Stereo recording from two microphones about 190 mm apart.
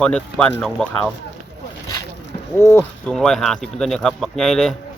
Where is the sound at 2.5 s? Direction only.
10° left (ahead or behind).